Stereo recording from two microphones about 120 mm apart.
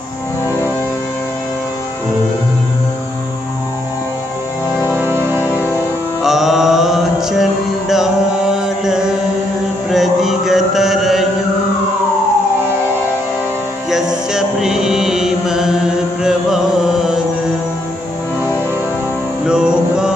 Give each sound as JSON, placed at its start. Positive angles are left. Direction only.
{"t": 4.9, "sound": "music", "side_deg": -20}
{"t": 5.4, "sound": "music", "side_deg": 20}
{"t": 6.2, "sound": "mantra", "side_deg": 0}
{"t": 13.8, "sound": "mantra", "side_deg": -5}
{"t": 19.4, "sound": "music", "side_deg": -5}